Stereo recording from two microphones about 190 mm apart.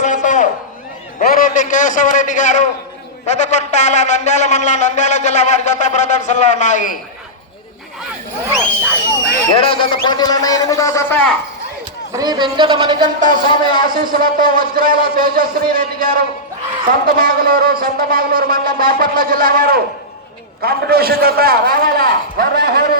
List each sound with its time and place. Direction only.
0.0 s a sound: 40° left (ahead or behind)
1.3 s a man's voice: 45° left (ahead or behind)
9.6 s a man's voice: 25° left (ahead or behind); by 11.3 s 10° left (ahead or behind)
12.1 s speech: 20° right (ahead or behind)
13.1 s a man's voice: 45° right (ahead or behind)